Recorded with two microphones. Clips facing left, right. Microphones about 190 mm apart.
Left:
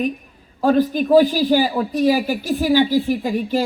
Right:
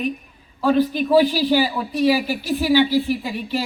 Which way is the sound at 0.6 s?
45° left (ahead or behind).